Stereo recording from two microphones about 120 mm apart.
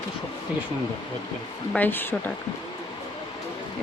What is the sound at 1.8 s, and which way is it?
Speech, 15° left (ahead or behind).